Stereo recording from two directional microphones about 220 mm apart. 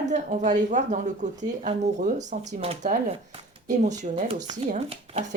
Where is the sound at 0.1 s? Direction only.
35° right (ahead or behind).